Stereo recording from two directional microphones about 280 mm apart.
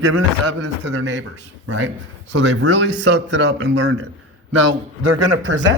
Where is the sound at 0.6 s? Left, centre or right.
Right.